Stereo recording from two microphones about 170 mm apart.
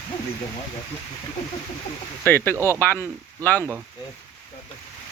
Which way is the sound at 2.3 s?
10° left (ahead or behind).